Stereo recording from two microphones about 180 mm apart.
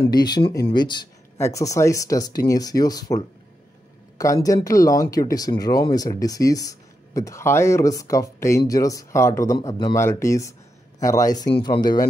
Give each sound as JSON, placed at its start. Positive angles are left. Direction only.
{"t": 0.0, "sound": "speech", "side_deg": 25}